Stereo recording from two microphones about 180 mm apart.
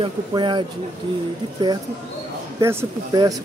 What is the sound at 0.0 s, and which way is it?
Speech, 25° right (ahead or behind).